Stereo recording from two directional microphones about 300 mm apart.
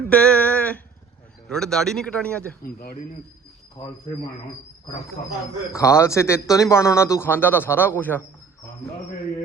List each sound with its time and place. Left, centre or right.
0.0 s a sound: centre
1.5 s a man's voice: centre
2.6 s speech: left
5.7 s speech: centre